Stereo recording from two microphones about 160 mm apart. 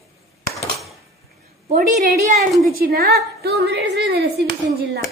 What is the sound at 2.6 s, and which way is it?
A woman's voice, 70° right (ahead or behind).